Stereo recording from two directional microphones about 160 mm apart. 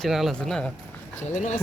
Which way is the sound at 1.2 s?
50° left (ahead or behind).